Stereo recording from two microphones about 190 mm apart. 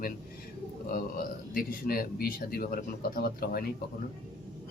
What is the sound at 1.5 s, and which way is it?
Speech, 50° left (ahead or behind).